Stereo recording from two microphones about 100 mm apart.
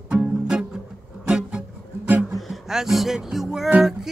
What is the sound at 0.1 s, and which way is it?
Music, 10° right (ahead or behind).